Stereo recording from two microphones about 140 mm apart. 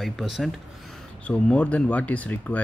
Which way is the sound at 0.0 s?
Centre (ahead or behind).